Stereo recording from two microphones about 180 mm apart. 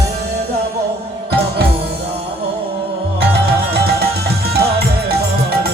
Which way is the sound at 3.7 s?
60° right (ahead or behind).